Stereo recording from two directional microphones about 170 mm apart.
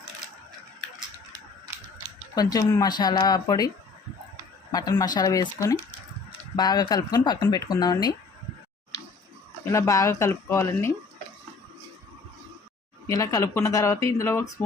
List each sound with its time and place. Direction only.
2.3 s speech: 20° left (ahead or behind)
4.7 s speech: 20° left (ahead or behind)
9.6 s speech: 15° left (ahead or behind)
13.1 s speech: 20° left (ahead or behind)